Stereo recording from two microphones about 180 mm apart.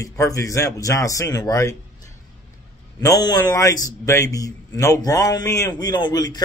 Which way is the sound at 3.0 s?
20° left (ahead or behind).